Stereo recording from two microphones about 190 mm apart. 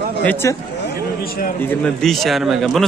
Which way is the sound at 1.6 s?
5° left (ahead or behind).